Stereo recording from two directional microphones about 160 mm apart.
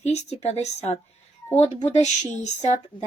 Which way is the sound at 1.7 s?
45° left (ahead or behind).